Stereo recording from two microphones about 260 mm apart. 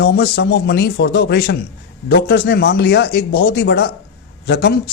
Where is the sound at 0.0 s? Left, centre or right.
Left.